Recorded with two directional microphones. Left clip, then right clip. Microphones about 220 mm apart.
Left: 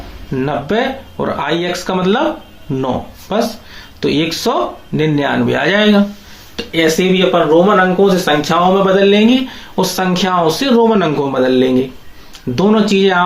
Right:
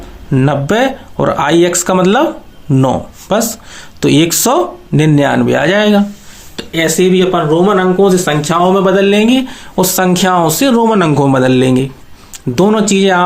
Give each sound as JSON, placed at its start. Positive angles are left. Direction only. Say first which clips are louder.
{"t": 0.3, "sound": "speech", "louder": "right 4 dB", "side_deg": -45}